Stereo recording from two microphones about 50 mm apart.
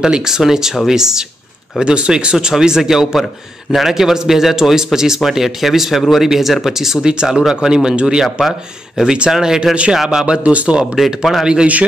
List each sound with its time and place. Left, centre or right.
0.0 s speech: centre
8.2 s speech: centre
10.4 s speech: right
11.0 s speech: centre